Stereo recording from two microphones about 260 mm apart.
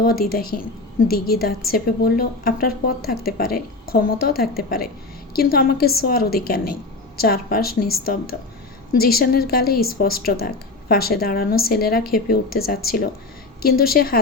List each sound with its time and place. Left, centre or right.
0.0 s speech: left